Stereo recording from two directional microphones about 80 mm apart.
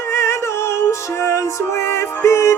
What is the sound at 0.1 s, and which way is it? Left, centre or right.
Music, left.